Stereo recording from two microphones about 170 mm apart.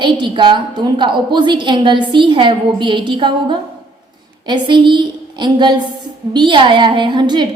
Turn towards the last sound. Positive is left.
turn(degrees=-25)  # may be behind; listen again after turning